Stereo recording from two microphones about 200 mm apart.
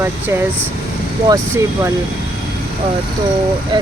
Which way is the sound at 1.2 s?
15° right (ahead or behind).